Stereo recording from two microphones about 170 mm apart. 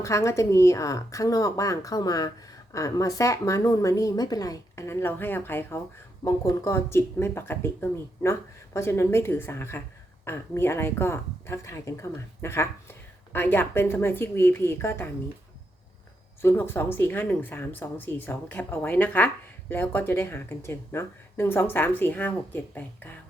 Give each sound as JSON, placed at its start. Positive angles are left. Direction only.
{"t": 0.0, "sound": "speech", "side_deg": 15}
{"t": 16.4, "sound": "speech", "side_deg": 15}